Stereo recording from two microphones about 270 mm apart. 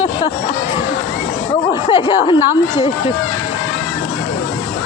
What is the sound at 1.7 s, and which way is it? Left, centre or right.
Speech, centre.